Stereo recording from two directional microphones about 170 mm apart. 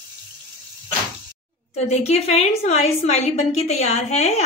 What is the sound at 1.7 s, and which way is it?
A woman's voice, 40° left (ahead or behind).